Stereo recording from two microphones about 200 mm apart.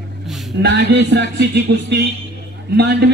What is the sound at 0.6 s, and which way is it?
A man's voice, 55° right (ahead or behind).